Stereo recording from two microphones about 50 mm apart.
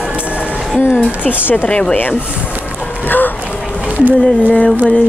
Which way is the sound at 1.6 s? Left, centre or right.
Left.